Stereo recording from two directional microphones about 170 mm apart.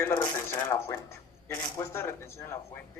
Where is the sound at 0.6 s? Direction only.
15° left (ahead or behind).